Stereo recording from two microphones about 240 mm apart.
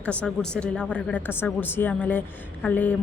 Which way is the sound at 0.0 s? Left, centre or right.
Centre.